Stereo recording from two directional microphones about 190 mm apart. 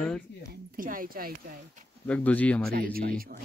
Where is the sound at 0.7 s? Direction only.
45° right (ahead or behind).